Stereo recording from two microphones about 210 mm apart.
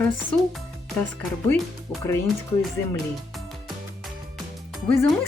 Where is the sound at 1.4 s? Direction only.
5° left (ahead or behind).